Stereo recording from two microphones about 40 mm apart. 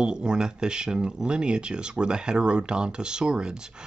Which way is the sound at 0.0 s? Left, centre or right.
Right.